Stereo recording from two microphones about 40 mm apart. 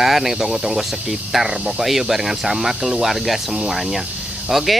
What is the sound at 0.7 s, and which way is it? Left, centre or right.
Speech, centre.